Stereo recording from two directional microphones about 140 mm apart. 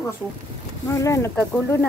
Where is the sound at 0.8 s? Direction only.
20° left (ahead or behind).